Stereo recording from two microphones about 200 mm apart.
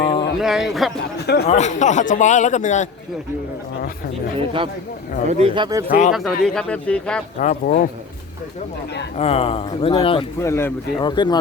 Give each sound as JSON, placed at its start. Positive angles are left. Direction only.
{"t": 0.0, "sound": "a sound", "side_deg": 25}
{"t": 0.4, "sound": "speech", "side_deg": 0}
{"t": 1.5, "sound": "a man's voice", "side_deg": 35}
{"t": 4.4, "sound": "speech", "side_deg": -25}
{"t": 6.1, "sound": "speech", "side_deg": 0}
{"t": 7.3, "sound": "a man's voice", "side_deg": 40}
{"t": 9.1, "sound": "speech", "side_deg": 30}
{"t": 10.4, "sound": "speech", "side_deg": 15}